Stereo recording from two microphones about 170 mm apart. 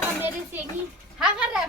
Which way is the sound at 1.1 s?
5° right (ahead or behind).